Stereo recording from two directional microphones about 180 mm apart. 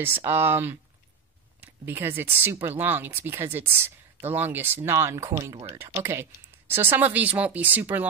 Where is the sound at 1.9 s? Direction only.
10° right (ahead or behind).